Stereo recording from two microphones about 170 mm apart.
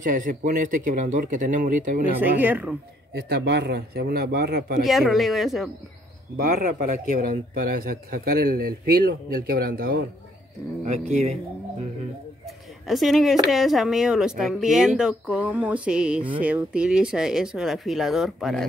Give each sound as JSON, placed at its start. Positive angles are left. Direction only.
{"t": 0.0, "sound": "speech", "side_deg": -50}
{"t": 2.1, "sound": "speech", "side_deg": -10}
{"t": 3.1, "sound": "speech", "side_deg": -75}
{"t": 4.8, "sound": "speech", "side_deg": 0}
{"t": 6.3, "sound": "a man's voice", "side_deg": -55}
{"t": 10.9, "sound": "speech", "side_deg": -40}
{"t": 12.4, "sound": "a sound", "side_deg": 0}
{"t": 13.5, "sound": "speech", "side_deg": 0}